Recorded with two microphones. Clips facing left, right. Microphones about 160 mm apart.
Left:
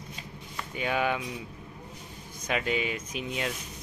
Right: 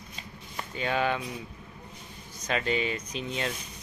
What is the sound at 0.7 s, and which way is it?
Speech, 10° left (ahead or behind).